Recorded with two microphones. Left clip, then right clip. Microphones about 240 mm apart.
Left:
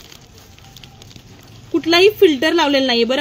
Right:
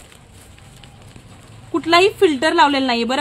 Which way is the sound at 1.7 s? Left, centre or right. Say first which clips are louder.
Left 1 dB; right.